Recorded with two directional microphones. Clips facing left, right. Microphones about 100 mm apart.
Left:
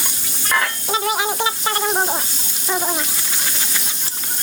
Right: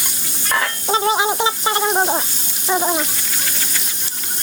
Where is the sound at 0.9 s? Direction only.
25° right (ahead or behind).